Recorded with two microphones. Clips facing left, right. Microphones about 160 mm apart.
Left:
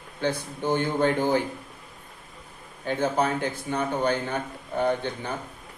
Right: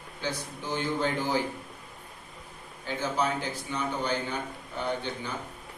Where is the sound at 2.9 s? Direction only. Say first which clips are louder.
Left 5 dB; 55° left (ahead or behind).